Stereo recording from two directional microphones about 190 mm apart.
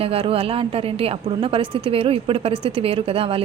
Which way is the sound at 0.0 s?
30° right (ahead or behind).